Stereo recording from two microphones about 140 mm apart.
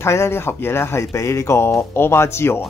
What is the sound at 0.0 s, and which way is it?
Speech, 20° left (ahead or behind).